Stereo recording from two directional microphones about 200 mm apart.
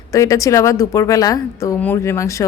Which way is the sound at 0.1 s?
15° left (ahead or behind).